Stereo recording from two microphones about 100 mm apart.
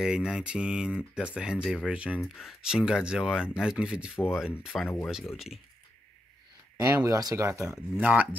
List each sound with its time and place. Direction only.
0.0 s speech: 5° right (ahead or behind)
6.8 s speech: 35° right (ahead or behind)
7.7 s speech: 15° right (ahead or behind)